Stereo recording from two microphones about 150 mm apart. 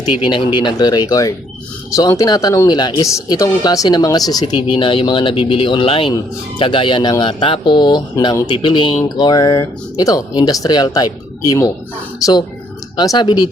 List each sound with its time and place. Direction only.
0.1 s speech: 35° left (ahead or behind)